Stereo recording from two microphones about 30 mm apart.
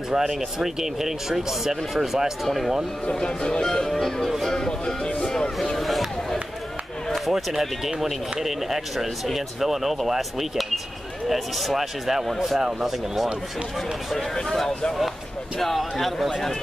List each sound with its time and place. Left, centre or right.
0.1 s speech: centre
3.1 s speech: left
3.6 s speech: centre
5.8 s a sound: centre
7.2 s speech: centre
15.6 s speech: centre